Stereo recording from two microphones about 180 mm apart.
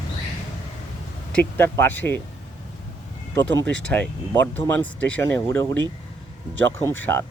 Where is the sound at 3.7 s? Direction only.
5° left (ahead or behind).